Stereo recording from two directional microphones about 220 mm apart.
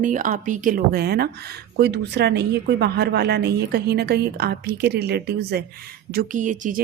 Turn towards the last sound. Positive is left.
turn(degrees=-35)  # may be behind; listen again after turning